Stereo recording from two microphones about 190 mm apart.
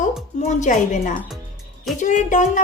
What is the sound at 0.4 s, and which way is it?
Speech, 40° left (ahead or behind).